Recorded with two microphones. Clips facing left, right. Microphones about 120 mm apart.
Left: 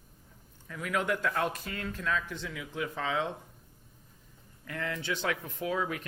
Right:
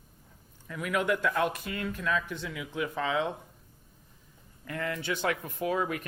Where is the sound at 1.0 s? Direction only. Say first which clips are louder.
Right 4 dB; 10° right (ahead or behind).